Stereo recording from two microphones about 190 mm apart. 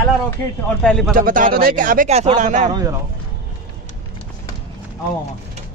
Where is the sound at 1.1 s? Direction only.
45° right (ahead or behind).